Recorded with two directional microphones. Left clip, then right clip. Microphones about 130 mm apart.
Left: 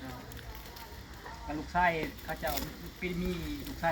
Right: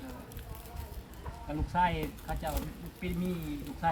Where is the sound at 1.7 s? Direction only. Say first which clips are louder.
Left 1 dB; 15° right (ahead or behind).